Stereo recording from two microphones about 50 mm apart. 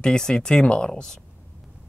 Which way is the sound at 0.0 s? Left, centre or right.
Centre.